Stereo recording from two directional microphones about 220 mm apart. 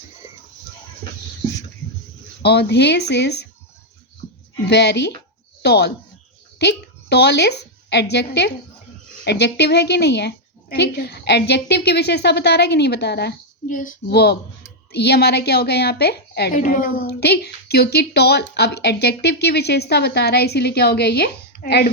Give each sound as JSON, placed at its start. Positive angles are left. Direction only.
{"t": 2.4, "sound": "a woman's voice", "side_deg": 50}
{"t": 4.7, "sound": "a woman's voice", "side_deg": 50}